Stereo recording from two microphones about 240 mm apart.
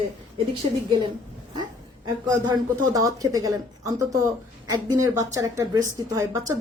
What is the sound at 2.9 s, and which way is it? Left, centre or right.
A woman's voice, centre.